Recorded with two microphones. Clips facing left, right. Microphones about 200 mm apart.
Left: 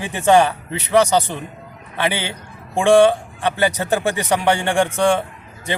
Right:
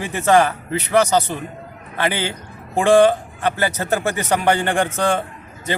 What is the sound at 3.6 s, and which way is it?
A man's voice, 15° left (ahead or behind).